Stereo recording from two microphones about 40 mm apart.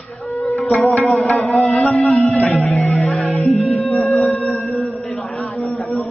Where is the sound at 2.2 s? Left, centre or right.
Left.